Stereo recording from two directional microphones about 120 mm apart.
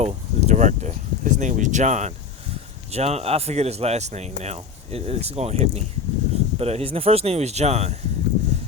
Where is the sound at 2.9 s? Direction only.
60° right (ahead or behind).